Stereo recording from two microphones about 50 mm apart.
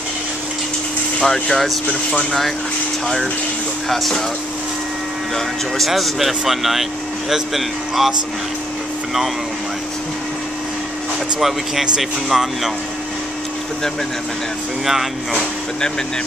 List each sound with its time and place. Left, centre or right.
1.2 s speech: centre
1.9 s speech: left
5.9 s speech: centre
11.3 s speech: centre
14.9 s speech: centre